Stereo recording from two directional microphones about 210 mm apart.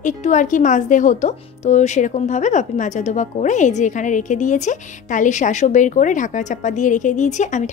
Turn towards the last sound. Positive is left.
turn(degrees=35)  # may be behind; listen again after turning